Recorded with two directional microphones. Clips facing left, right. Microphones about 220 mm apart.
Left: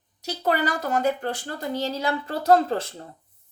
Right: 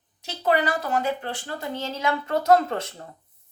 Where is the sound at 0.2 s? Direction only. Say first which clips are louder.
Right 1 dB; 40° left (ahead or behind).